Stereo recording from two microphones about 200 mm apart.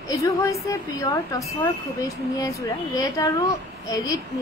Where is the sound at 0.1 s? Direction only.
15° left (ahead or behind).